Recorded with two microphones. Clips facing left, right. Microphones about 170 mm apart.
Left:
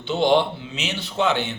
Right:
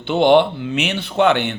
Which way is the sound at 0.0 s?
60° right (ahead or behind).